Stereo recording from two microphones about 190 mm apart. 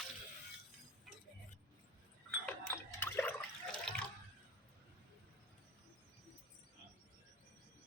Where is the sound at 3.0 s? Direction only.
10° left (ahead or behind).